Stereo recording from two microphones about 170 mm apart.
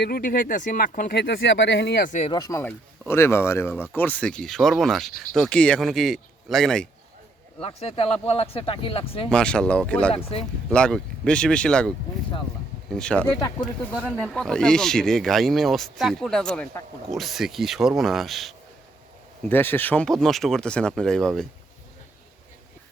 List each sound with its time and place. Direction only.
0.0 s speech: 60° left (ahead or behind); by 2.0 s 80° left
2.3 s speech: 20° left (ahead or behind); by 6.8 s 5° left (ahead or behind)
7.6 s speech: 35° left (ahead or behind)
9.3 s speech: 5° left (ahead or behind)
10.3 s speech: 35° left (ahead or behind)
10.7 s speech: 5° left (ahead or behind)
19.5 s speech: 10° left (ahead or behind)